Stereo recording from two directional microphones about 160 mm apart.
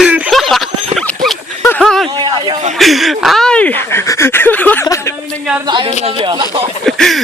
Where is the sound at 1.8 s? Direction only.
Centre (ahead or behind).